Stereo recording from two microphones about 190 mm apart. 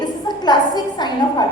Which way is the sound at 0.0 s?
20° left (ahead or behind).